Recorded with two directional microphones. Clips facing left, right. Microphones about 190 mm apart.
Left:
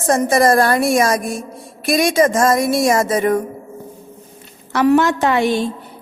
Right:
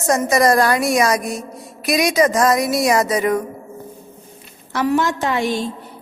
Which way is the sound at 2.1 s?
25° left (ahead or behind).